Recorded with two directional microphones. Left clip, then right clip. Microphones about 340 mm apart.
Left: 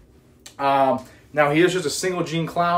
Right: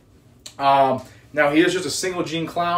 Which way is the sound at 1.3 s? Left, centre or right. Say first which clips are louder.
Even; centre.